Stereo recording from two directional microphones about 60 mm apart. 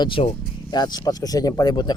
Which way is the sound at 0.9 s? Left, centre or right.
Left.